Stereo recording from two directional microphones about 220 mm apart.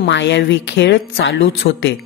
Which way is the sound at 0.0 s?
55° left (ahead or behind).